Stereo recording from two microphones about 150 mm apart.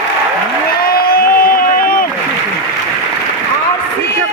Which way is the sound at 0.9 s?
90° left.